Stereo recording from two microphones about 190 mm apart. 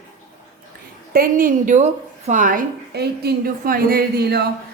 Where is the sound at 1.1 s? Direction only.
50° right (ahead or behind).